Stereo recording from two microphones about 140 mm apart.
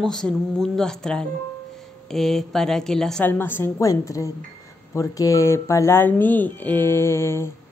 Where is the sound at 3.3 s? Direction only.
15° left (ahead or behind).